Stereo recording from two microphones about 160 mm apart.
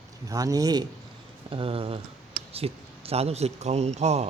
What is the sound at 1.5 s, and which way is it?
Speech, 35° right (ahead or behind).